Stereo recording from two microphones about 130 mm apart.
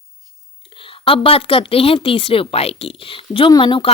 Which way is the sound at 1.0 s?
45° left (ahead or behind).